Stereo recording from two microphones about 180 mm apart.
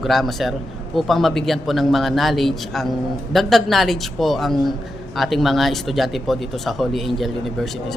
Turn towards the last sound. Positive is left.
turn(degrees=0)  # may be behind; listen again after turning